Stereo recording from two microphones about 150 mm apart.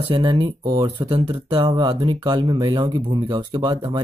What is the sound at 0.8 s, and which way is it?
Speech, 35° right (ahead or behind).